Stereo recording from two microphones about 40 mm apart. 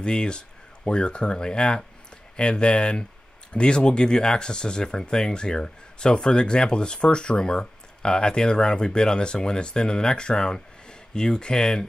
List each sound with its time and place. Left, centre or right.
0.0 s speech: left